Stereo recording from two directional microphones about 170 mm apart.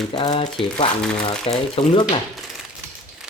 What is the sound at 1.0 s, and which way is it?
Speech, 5° left (ahead or behind).